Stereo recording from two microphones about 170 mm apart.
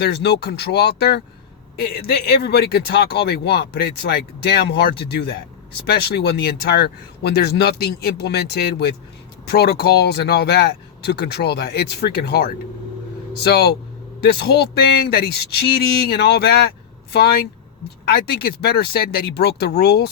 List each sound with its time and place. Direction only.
0.0 s speech: 75° left (ahead or behind)
18.0 s speech: 65° left (ahead or behind)